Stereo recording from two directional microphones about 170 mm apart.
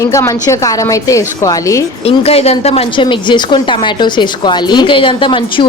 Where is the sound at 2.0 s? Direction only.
35° left (ahead or behind).